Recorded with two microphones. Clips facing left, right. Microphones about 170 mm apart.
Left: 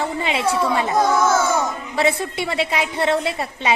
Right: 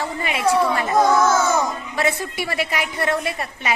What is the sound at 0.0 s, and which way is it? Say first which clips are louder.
Speech: left 3 dB; 25° left (ahead or behind).